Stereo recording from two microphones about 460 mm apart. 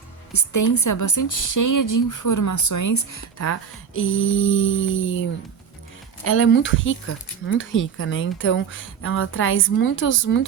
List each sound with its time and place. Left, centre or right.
0.3 s a woman's voice: left
6.2 s speech: left